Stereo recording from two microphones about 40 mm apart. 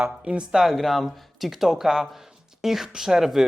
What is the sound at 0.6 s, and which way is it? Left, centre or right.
Speech, centre.